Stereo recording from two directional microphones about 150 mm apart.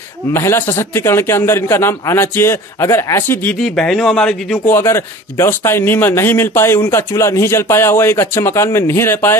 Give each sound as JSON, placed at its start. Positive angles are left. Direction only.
{"t": 0.3, "sound": "a man's voice", "side_deg": 15}
{"t": 4.7, "sound": "a man's voice", "side_deg": 15}